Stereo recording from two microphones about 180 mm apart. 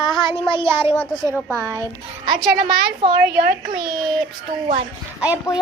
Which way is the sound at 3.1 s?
65° right (ahead or behind).